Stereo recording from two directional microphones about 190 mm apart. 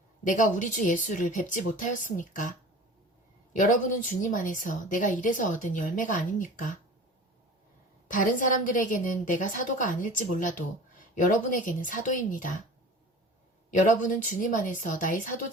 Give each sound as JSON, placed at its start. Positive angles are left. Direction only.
{"t": 0.3, "sound": "a woman's voice", "side_deg": 45}
{"t": 3.5, "sound": "a woman's voice", "side_deg": 45}
{"t": 8.1, "sound": "a woman's voice", "side_deg": 45}
{"t": 13.7, "sound": "a woman's voice", "side_deg": 45}